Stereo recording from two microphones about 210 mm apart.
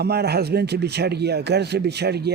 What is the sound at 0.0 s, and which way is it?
Speech, 50° right (ahead or behind).